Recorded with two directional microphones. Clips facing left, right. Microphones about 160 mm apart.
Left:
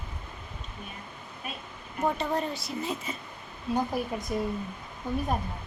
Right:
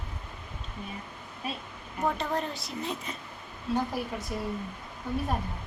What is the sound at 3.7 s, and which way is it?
Speech, 15° left (ahead or behind).